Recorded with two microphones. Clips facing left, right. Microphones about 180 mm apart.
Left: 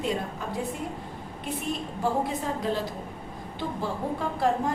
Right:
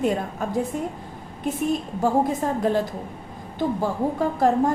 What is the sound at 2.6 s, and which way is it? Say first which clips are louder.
A woman's voice: right 6 dB; 50° right (ahead or behind).